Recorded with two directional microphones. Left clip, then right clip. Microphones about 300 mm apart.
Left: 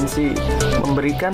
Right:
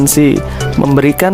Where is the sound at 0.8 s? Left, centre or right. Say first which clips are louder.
Right 9 dB; right.